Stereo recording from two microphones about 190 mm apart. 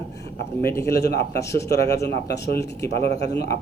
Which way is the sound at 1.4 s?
15° left (ahead or behind).